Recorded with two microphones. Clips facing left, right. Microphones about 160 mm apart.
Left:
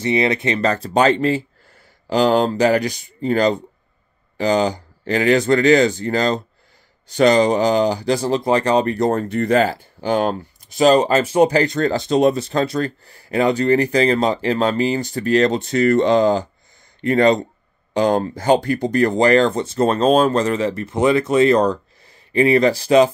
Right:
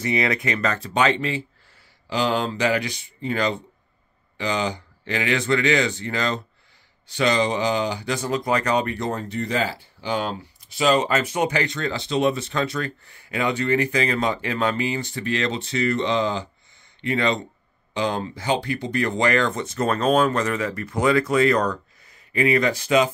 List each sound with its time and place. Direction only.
0.0 s speech: 25° left (ahead or behind)